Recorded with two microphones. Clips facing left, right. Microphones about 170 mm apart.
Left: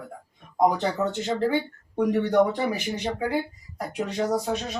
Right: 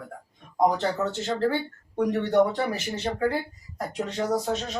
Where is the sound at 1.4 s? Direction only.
15° left (ahead or behind).